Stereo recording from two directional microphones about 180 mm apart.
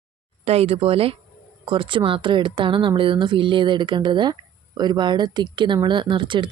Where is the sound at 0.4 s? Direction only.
35° right (ahead or behind).